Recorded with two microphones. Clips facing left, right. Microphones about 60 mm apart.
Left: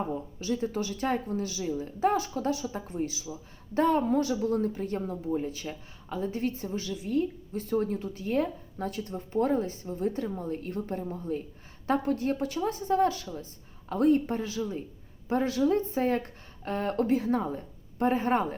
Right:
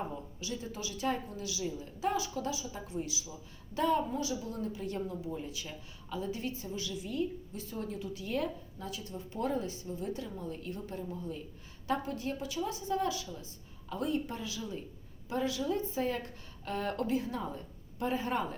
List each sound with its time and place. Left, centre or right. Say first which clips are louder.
0.1 s a woman's voice: left 9 dB; left
15.3 s a woman's voice: left 7 dB; left